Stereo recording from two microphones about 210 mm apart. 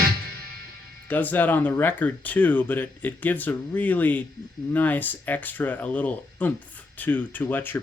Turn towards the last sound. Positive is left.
turn(degrees=10)  # may be behind; listen again after turning